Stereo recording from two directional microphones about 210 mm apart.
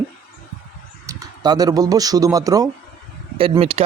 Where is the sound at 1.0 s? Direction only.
15° right (ahead or behind).